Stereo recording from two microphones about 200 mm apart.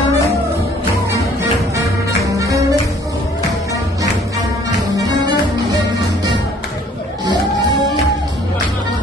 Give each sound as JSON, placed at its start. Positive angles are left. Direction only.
{"t": 2.3, "sound": "music", "side_deg": -15}
{"t": 4.7, "sound": "music", "side_deg": -20}